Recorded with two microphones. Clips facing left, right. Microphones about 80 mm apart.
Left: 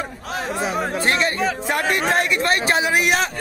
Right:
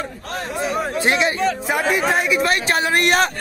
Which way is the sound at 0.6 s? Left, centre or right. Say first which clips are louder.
Right 2 dB; centre.